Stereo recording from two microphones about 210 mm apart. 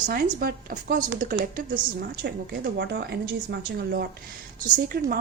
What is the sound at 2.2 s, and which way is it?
A woman's voice, 50° right (ahead or behind).